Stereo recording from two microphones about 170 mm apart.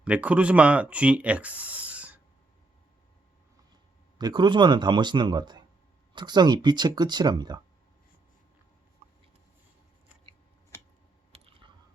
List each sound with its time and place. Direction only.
0.0 s speech: 5° right (ahead or behind)
4.2 s speech: 25° right (ahead or behind)